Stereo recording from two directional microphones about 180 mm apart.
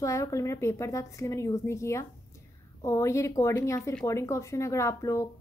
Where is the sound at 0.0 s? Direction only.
15° left (ahead or behind).